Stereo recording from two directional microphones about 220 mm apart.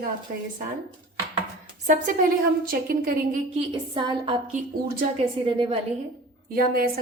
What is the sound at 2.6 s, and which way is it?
Speech, 40° right (ahead or behind).